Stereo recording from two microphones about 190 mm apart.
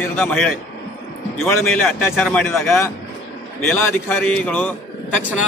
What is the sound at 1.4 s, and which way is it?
Speech, 10° left (ahead or behind).